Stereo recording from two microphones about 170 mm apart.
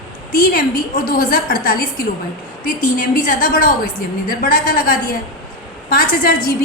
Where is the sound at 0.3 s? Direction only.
55° left (ahead or behind).